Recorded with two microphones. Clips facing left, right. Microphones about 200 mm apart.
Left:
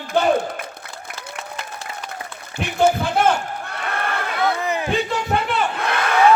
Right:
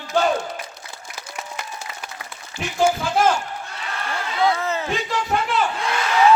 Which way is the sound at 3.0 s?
60° left (ahead or behind).